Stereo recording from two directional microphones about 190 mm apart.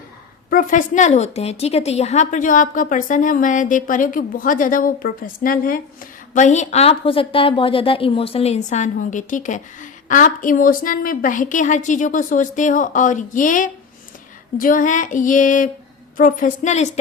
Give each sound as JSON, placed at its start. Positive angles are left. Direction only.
{"t": 0.5, "sound": "a woman's voice", "side_deg": 45}